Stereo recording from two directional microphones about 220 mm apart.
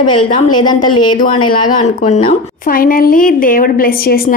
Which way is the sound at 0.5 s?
20° left (ahead or behind).